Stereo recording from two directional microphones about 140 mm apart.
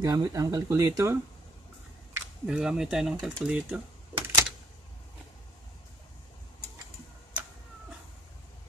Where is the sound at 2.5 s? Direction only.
5° right (ahead or behind).